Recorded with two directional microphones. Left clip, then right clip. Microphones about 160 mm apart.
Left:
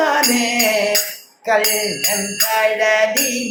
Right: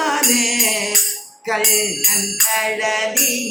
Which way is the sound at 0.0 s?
45° left (ahead or behind).